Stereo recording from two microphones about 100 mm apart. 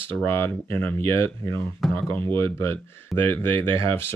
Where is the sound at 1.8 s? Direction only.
5° left (ahead or behind).